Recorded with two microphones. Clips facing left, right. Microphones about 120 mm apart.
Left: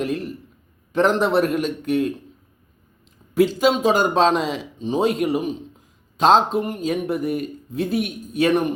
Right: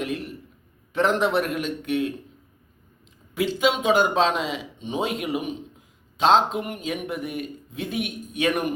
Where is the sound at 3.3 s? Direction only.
40° left (ahead or behind).